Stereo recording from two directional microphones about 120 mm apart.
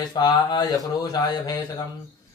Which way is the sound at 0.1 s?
35° left (ahead or behind).